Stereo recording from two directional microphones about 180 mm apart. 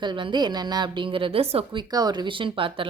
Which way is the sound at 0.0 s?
25° right (ahead or behind).